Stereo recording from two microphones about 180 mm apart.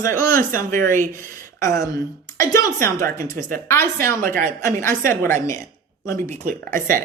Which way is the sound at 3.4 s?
50° right (ahead or behind).